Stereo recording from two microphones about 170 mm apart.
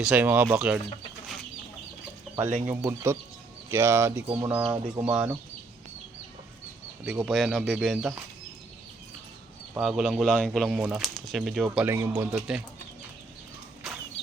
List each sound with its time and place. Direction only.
0.0 s bird: 10° right (ahead or behind)
0.5 s speech: 5° right (ahead or behind)
2.6 s bird: 15° right (ahead or behind)
7.0 s speech: centre (ahead or behind)
9.7 s speech: 5° right (ahead or behind)
11.9 s bird: 15° right (ahead or behind)
12.3 s speech: 5° right (ahead or behind)